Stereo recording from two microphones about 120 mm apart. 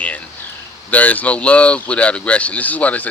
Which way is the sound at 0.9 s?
15° left (ahead or behind).